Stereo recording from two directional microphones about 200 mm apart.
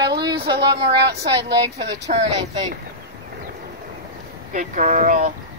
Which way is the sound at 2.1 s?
40° right (ahead or behind).